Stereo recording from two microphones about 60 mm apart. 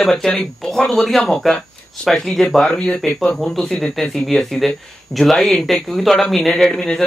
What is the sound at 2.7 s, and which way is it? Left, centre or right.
Speech, left.